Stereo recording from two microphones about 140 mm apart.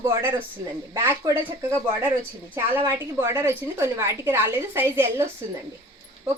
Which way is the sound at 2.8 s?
20° right (ahead or behind).